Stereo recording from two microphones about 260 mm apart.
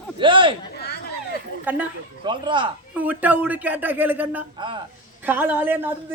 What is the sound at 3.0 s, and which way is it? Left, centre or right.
Speech, centre.